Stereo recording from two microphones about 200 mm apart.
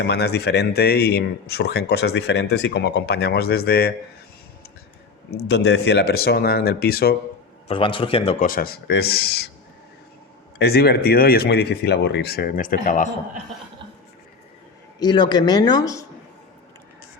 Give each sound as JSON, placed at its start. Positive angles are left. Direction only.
{"t": 0.0, "sound": "speech", "side_deg": 55}
{"t": 5.3, "sound": "speech", "side_deg": 55}
{"t": 7.7, "sound": "speech", "side_deg": 25}
{"t": 8.4, "sound": "speech", "side_deg": 45}
{"t": 10.6, "sound": "speech", "side_deg": 50}
{"t": 14.9, "sound": "speech", "side_deg": 20}